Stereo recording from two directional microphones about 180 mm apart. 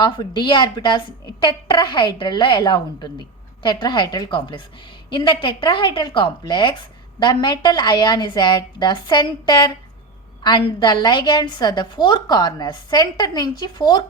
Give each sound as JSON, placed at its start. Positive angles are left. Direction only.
{"t": 0.0, "sound": "a woman's voice", "side_deg": 25}